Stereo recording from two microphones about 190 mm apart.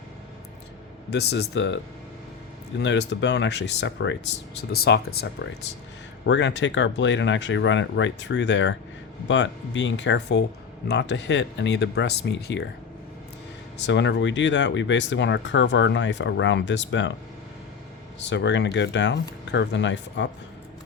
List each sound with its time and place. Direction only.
1.1 s speech: 60° left (ahead or behind)
4.7 s speech: 55° left (ahead or behind)
13.8 s speech: 70° left (ahead or behind)
18.2 s speech: 70° left (ahead or behind)